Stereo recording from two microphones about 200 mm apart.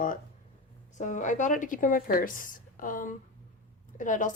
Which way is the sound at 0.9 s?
40° left (ahead or behind).